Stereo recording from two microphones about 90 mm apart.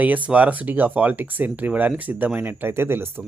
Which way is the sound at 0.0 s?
15° right (ahead or behind).